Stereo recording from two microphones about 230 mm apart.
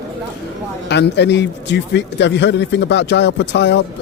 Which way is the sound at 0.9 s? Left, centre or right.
Left.